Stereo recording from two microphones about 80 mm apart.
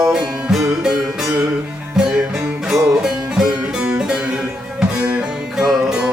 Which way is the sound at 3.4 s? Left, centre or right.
Centre.